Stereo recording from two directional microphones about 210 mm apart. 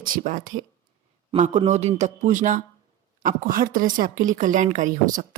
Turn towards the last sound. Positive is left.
turn(degrees=-40)  # may be behind; listen again after turning